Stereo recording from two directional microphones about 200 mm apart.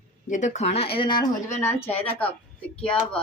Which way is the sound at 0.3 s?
40° left (ahead or behind).